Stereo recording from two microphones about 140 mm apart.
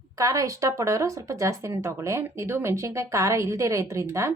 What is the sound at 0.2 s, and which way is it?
Speech, 25° right (ahead or behind).